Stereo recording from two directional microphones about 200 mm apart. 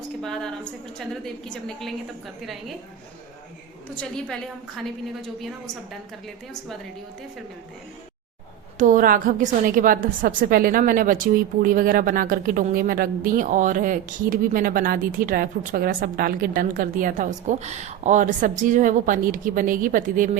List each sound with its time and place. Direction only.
0.2 s a woman's voice: 5° left (ahead or behind)
5.4 s a woman's voice: centre (ahead or behind)
8.8 s a woman's voice: 40° right (ahead or behind)